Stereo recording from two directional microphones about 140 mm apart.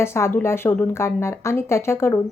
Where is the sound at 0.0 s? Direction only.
20° left (ahead or behind).